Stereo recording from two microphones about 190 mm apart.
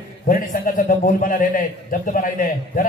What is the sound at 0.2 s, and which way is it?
A man's voice, 50° left (ahead or behind).